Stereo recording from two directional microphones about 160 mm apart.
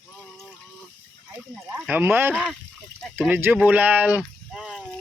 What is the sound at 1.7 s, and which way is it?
Speech, 10° right (ahead or behind).